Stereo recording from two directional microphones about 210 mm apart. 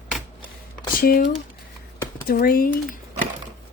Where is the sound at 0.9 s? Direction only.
45° left (ahead or behind).